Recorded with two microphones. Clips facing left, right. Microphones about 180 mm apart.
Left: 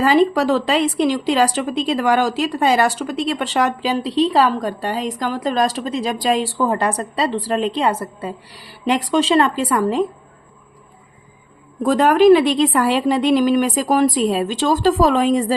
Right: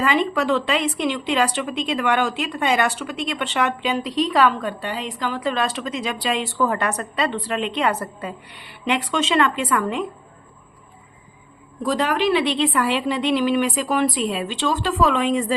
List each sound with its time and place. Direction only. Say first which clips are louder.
0.0 s speech: left 6 dB; 35° left (ahead or behind)
11.8 s speech: left 8 dB; 50° left (ahead or behind)